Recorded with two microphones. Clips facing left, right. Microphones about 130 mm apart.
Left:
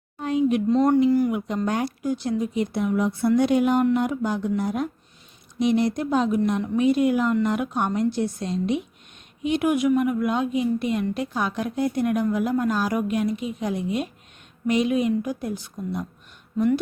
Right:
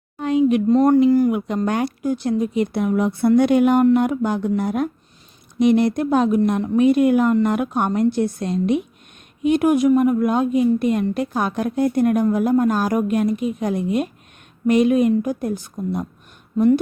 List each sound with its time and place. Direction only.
0.2 s a sound: 75° right (ahead or behind)
0.7 s speech: 50° right (ahead or behind)
1.1 s speech: 45° right (ahead or behind)
1.6 s speech: 65° right (ahead or behind); by 16.0 s 45° right (ahead or behind)